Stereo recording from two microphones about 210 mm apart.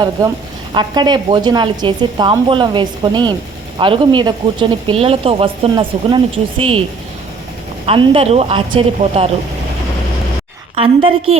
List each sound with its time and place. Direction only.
0.7 s speech: 20° right (ahead or behind)
7.9 s speech: 25° right (ahead or behind)
10.8 s speech: 30° right (ahead or behind)